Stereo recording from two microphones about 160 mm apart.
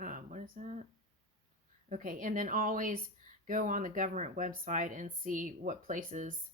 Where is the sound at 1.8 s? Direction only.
50° right (ahead or behind).